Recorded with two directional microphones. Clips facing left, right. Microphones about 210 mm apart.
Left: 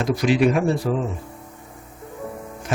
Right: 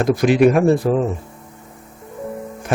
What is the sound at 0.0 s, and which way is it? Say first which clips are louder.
Speech: right 5 dB; 50° right (ahead or behind).